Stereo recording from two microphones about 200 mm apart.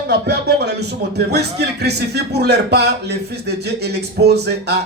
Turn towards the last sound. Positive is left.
turn(degrees=-55)  # may be behind; listen again after turning